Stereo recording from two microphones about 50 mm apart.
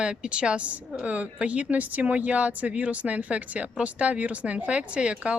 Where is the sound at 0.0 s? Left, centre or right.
Right.